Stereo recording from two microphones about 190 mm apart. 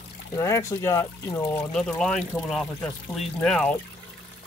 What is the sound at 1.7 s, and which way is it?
Speech, centre (ahead or behind).